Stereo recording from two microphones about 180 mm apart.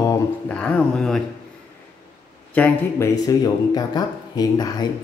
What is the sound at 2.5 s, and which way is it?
A man's voice, 10° left (ahead or behind).